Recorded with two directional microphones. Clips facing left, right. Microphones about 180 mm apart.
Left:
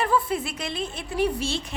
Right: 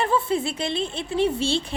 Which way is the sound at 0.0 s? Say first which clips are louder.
Right 2 dB; 25° right (ahead or behind).